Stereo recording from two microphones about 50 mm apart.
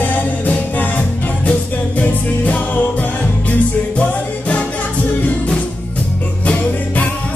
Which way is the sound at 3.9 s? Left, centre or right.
Left.